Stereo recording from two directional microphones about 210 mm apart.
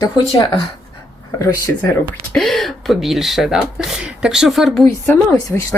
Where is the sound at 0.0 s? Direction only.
15° left (ahead or behind).